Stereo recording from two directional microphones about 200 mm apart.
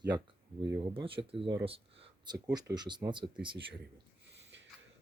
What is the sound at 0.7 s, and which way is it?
Speech, 25° right (ahead or behind).